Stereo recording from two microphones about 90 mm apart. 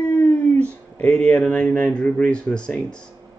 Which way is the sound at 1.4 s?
10° left (ahead or behind).